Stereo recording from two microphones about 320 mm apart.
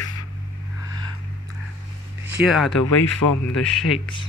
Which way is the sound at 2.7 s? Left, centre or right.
Left.